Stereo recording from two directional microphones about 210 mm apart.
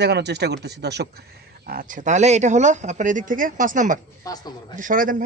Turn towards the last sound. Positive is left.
turn(degrees=-40)  # may be behind; listen again after turning